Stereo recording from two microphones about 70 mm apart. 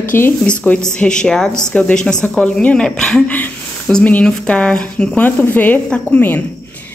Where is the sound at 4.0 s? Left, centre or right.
Left.